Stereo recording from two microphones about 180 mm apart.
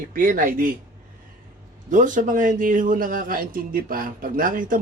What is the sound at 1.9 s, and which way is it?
A man's voice, 45° right (ahead or behind).